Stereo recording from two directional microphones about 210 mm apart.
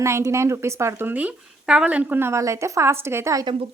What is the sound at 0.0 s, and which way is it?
Speech, 15° right (ahead or behind).